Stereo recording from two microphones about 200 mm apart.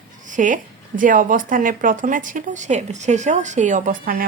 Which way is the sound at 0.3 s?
40° right (ahead or behind).